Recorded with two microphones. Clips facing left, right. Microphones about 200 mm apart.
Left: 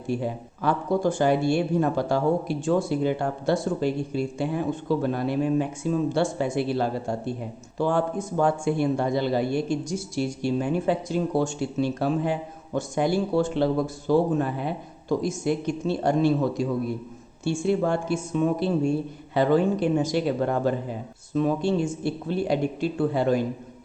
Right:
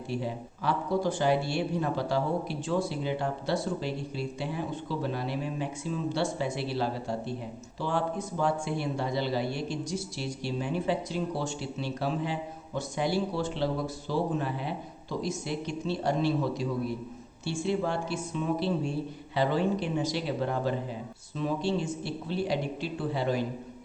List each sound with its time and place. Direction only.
0.1 s speech: 45° left (ahead or behind)